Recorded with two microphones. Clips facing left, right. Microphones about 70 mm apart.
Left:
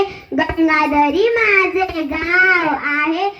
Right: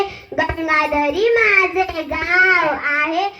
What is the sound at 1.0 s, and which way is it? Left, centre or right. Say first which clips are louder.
A child's voice: left 1 dB; centre.